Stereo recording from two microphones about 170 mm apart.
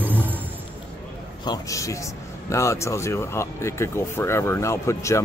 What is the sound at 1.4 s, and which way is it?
A man's voice, 20° left (ahead or behind).